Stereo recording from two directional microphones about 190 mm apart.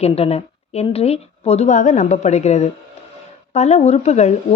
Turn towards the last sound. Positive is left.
turn(degrees=35)  # may be behind; listen again after turning